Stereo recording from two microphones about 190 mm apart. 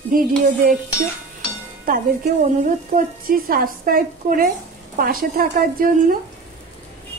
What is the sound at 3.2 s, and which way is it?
Speech, 50° right (ahead or behind).